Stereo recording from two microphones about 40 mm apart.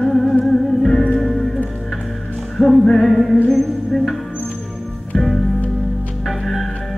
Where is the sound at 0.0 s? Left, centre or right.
Centre.